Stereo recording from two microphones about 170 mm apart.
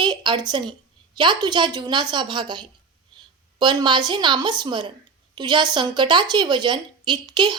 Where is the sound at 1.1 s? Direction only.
25° right (ahead or behind).